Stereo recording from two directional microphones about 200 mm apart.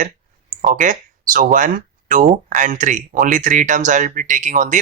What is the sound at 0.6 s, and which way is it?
Speech, 40° right (ahead or behind).